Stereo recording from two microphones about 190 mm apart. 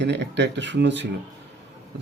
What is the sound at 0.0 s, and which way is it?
Speech, 65° right (ahead or behind).